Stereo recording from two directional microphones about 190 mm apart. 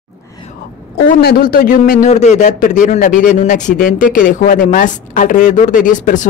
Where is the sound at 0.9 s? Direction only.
50° left (ahead or behind).